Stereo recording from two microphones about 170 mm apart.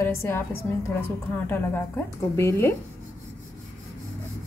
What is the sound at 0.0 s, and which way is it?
Speech, 15° left (ahead or behind).